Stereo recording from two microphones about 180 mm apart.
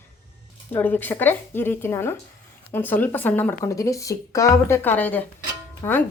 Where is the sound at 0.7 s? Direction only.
10° left (ahead or behind).